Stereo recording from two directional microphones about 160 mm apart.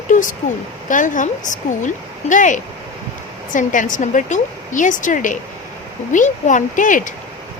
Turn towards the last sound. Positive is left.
turn(degrees=55)  # may be behind; listen again after turning